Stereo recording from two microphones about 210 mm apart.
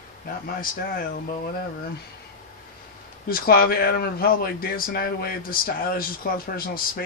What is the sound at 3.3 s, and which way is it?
Speech, 45° left (ahead or behind).